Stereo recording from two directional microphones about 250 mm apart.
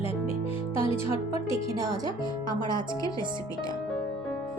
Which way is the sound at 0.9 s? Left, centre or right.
Centre.